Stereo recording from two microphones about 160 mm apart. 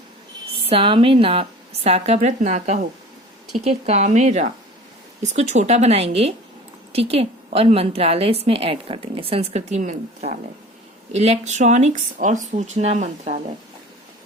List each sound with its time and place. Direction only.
0.6 s a woman's voice: 35° right (ahead or behind)